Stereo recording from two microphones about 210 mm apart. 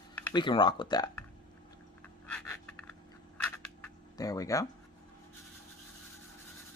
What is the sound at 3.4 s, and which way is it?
Camera, 15° left (ahead or behind).